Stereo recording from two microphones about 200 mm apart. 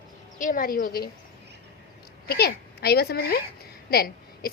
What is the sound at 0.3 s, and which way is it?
Speech, 40° left (ahead or behind).